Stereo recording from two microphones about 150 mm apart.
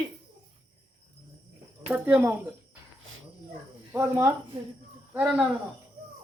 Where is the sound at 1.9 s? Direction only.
10° right (ahead or behind).